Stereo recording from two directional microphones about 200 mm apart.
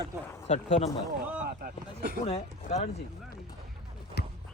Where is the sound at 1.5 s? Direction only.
45° right (ahead or behind).